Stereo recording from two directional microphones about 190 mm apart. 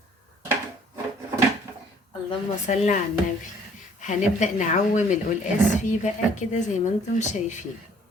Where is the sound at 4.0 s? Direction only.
40° left (ahead or behind).